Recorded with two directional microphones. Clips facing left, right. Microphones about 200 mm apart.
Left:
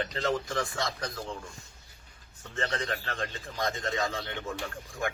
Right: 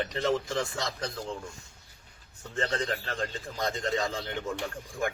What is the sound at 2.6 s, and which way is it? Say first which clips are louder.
A man's voice: right 2 dB; 30° right (ahead or behind).